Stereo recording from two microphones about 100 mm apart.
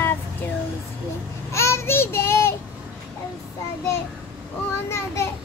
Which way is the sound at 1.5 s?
25° left (ahead or behind).